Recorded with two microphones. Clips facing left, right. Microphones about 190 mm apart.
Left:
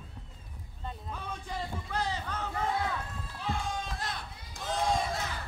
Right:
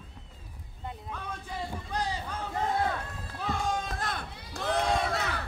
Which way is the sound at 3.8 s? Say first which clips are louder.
Right 3 dB; 55° right (ahead or behind).